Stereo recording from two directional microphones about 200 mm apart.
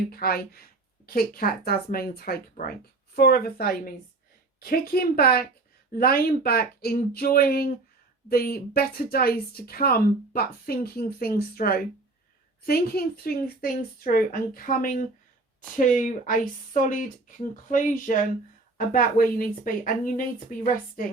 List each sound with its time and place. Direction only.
0.1 s speech: 50° left (ahead or behind)